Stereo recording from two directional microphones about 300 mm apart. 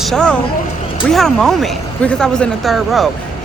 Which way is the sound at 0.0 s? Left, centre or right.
Centre.